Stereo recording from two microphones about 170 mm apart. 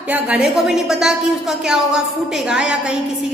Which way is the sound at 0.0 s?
5° right (ahead or behind).